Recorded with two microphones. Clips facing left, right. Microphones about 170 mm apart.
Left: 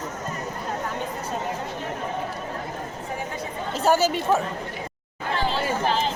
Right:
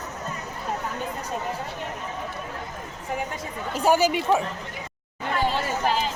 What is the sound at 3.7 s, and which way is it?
Speech, 10° right (ahead or behind).